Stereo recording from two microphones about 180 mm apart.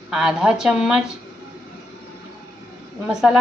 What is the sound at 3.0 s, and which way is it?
Speech, 5° right (ahead or behind).